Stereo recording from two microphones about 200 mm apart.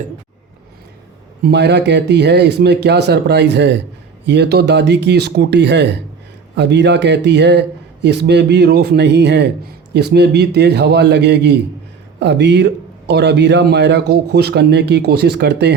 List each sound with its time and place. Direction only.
1.4 s a man's voice: 55° right (ahead or behind)